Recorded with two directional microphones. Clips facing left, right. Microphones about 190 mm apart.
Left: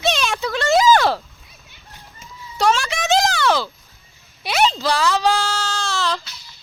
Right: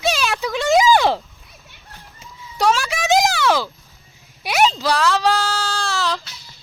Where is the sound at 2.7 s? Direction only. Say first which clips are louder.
Right 1 dB; 5° right (ahead or behind).